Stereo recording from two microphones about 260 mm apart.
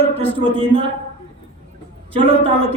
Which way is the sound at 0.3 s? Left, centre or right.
Right.